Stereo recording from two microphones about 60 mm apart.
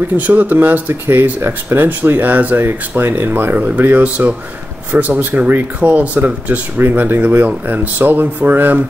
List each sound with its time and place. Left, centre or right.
0.3 s speech: right